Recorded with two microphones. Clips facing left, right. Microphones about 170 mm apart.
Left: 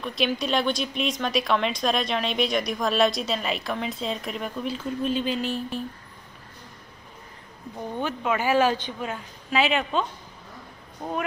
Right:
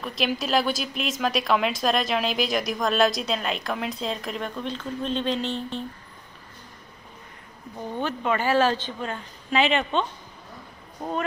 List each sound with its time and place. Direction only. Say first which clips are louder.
0.0 s a woman's voice: left 1 dB; centre (ahead or behind)
8.0 s speech: right 1 dB; 5° left (ahead or behind)